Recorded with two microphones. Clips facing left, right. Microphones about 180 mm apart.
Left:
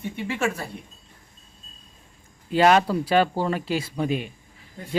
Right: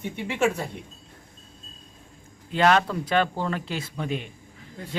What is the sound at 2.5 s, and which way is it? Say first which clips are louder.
A man's voice: left 3 dB; 10° left (ahead or behind).